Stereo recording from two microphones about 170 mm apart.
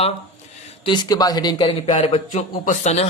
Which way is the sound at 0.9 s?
25° left (ahead or behind).